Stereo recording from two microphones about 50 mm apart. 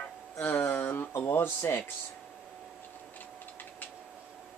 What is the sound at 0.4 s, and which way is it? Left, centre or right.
Speech, left.